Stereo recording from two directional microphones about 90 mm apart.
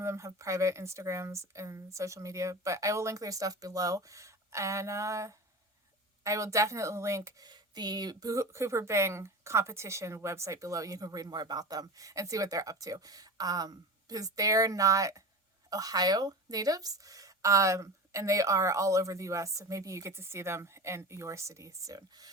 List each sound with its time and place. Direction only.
0.0 s a woman's voice: 35° right (ahead or behind)